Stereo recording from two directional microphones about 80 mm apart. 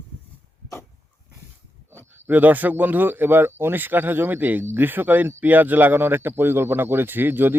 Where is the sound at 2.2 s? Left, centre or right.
Right.